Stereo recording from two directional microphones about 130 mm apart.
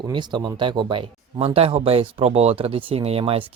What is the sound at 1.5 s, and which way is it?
Speech, 50° right (ahead or behind).